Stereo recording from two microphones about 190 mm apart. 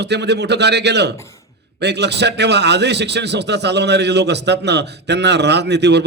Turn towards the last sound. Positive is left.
turn(degrees=-60)  # may be behind; listen again after turning